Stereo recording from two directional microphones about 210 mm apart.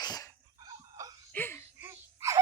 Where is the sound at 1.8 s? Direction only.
10° right (ahead or behind).